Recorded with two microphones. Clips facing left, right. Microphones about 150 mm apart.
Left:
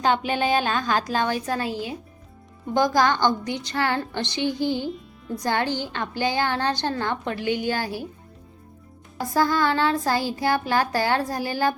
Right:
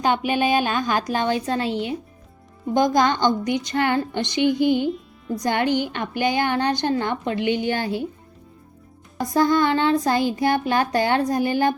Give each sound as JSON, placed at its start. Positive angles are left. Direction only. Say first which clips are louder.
{"t": 0.0, "sound": "a woman's voice", "louder": "right 2 dB", "side_deg": -15}
{"t": 4.9, "sound": "music", "louder": "right 5 dB", "side_deg": 0}
{"t": 5.4, "sound": "a woman's voice", "louder": "right 4 dB", "side_deg": -20}
{"t": 9.2, "sound": "a woman's voice", "louder": "right 3 dB", "side_deg": -20}